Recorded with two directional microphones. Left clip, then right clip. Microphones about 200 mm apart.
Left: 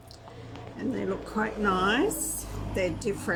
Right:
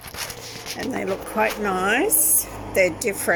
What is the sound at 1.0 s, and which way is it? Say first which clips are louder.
Speech: right 9 dB; 20° right (ahead or behind).